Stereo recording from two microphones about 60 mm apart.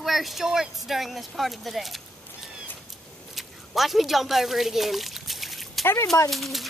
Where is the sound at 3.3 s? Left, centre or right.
Centre.